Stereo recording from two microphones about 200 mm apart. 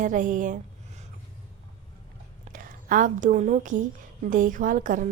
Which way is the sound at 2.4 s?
45° right (ahead or behind).